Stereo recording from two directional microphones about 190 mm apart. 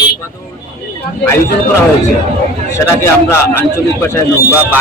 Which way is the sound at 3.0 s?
10° left (ahead or behind).